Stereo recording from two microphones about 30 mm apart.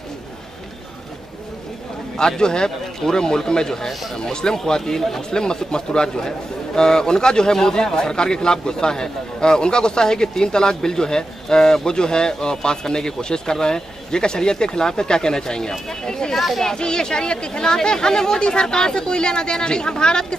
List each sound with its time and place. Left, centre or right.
2.1 s a man's voice: left
16.3 s speech: centre
16.6 s a man's voice: left